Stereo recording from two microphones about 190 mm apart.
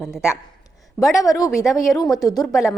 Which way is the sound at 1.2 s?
20° left (ahead or behind).